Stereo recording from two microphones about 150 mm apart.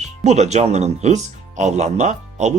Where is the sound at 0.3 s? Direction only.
50° right (ahead or behind).